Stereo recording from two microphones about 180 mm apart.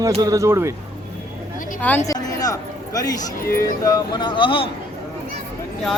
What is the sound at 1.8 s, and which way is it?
A woman's voice, 15° left (ahead or behind).